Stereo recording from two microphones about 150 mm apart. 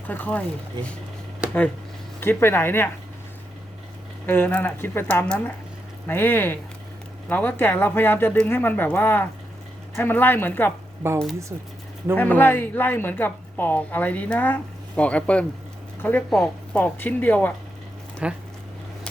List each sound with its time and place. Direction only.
0.1 s a woman's voice: 10° left (ahead or behind)
2.2 s a woman's voice: 15° left (ahead or behind)
4.3 s a woman's voice: 10° left (ahead or behind)
11.0 s speech: 15° right (ahead or behind)
12.1 s a woman's voice: 15° left (ahead or behind)
18.2 s speech: 5° right (ahead or behind)